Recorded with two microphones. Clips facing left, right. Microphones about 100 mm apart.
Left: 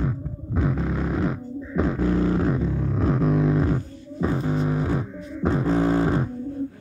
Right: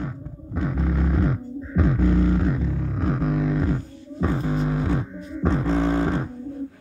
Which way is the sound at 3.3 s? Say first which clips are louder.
Left 2 dB; 25° left (ahead or behind).